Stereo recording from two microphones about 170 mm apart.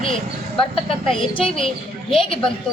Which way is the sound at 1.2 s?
30° left (ahead or behind).